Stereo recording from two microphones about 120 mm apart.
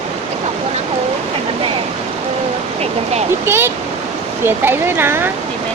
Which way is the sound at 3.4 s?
20° right (ahead or behind).